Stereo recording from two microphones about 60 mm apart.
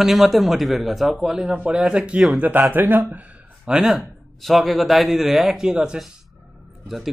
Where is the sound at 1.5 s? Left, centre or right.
Centre.